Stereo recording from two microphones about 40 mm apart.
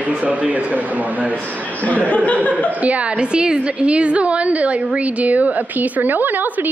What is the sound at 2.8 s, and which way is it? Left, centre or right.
Speech, right.